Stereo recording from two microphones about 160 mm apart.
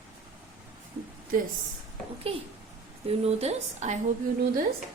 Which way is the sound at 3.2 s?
45° right (ahead or behind).